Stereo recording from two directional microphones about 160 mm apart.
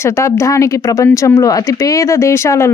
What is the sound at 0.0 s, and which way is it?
Speech, 20° left (ahead or behind).